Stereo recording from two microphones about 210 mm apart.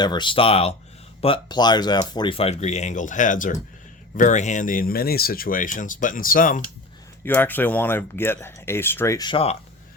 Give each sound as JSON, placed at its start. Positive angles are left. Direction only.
{"t": 0.0, "sound": "speech", "side_deg": 20}
{"t": 7.3, "sound": "speech", "side_deg": 10}